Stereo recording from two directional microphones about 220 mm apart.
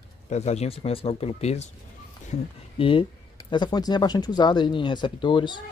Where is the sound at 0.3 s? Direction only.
30° left (ahead or behind).